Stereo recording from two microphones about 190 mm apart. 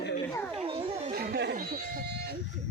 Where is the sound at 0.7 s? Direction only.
30° right (ahead or behind).